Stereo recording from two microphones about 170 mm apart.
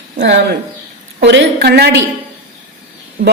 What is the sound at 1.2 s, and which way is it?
Speech, 90° right.